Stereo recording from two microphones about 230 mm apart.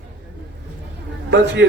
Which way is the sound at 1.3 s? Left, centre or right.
Right.